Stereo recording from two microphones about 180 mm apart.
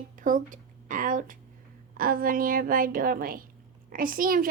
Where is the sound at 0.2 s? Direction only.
45° right (ahead or behind).